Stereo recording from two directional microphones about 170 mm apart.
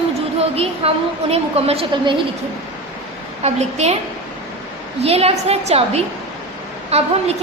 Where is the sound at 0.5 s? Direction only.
35° right (ahead or behind).